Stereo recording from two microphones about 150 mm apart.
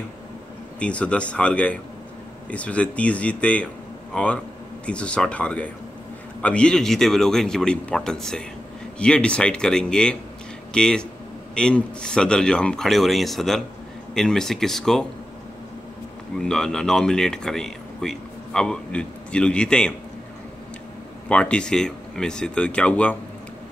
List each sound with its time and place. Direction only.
0.7 s speech: 10° left (ahead or behind)
16.3 s speech: 5° left (ahead or behind)
21.3 s speech: 5° left (ahead or behind)